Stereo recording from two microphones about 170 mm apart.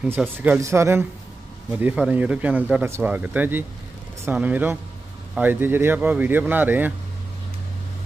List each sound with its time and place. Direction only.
0.4 s speech: 15° right (ahead or behind)